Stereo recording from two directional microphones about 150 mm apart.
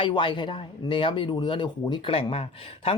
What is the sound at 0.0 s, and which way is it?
Speech, 35° left (ahead or behind).